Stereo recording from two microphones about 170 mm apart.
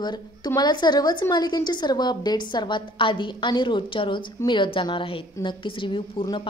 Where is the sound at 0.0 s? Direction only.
25° left (ahead or behind).